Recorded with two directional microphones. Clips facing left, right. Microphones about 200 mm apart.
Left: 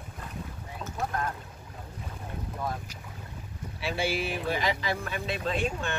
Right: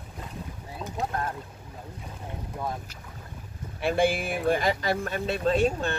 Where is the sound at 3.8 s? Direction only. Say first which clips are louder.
Right 6 dB; 50° right (ahead or behind).